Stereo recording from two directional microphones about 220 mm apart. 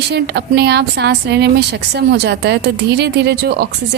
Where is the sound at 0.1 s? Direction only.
50° right (ahead or behind).